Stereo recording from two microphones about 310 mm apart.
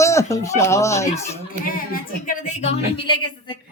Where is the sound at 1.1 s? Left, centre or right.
Left.